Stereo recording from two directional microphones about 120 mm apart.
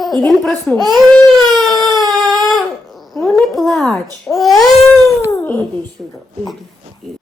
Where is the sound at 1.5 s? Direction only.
Centre (ahead or behind).